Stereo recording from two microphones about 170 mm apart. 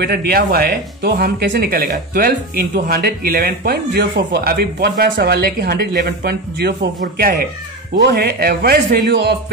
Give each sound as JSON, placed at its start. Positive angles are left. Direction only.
{"t": 0.0, "sound": "speech", "side_deg": -70}